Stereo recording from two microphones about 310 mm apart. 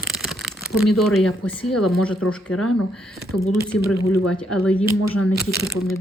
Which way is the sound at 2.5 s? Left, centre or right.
Left.